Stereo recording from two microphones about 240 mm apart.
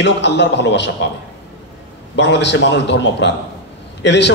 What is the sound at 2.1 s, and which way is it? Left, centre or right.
A man's voice, left.